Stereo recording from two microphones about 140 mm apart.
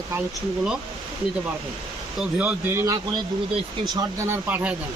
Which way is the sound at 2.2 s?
10° right (ahead or behind).